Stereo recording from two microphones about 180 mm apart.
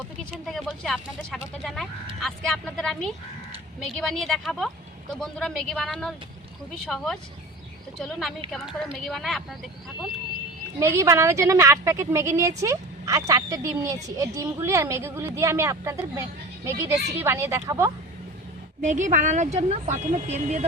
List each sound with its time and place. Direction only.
0.2 s speech: centre (ahead or behind)
10.8 s a woman's voice: 15° right (ahead or behind)
18.8 s a woman's voice: 45° right (ahead or behind)